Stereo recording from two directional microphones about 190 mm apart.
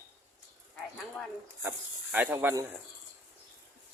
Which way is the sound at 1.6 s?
10° right (ahead or behind).